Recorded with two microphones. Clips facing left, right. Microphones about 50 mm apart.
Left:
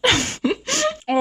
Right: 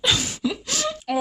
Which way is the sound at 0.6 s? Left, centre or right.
Left.